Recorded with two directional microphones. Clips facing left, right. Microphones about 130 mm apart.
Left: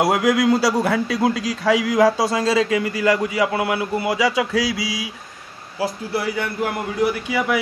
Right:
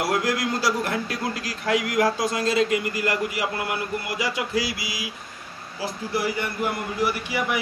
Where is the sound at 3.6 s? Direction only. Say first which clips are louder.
Left 7 dB; 90° left.